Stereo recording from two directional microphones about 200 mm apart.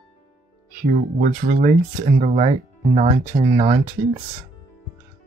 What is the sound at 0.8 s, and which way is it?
Speech, 40° right (ahead or behind).